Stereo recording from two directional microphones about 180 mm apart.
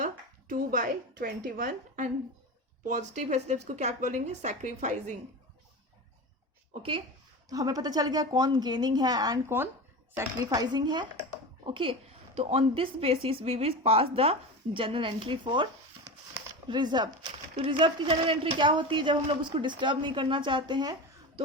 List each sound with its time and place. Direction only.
0.0 s a woman's voice: 45° right (ahead or behind)
7.5 s a woman's voice: 20° right (ahead or behind)
16.6 s a woman's voice: 25° right (ahead or behind)